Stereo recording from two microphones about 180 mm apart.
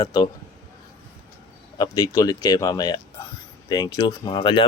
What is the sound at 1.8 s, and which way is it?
Speech, 20° left (ahead or behind).